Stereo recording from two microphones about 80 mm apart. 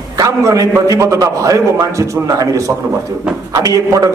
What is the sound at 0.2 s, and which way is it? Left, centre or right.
A man's voice, right.